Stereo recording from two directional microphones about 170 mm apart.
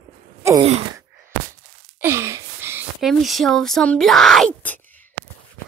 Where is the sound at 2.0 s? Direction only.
15° right (ahead or behind).